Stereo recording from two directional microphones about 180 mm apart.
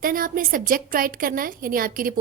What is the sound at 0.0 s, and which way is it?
A woman's voice, 50° right (ahead or behind).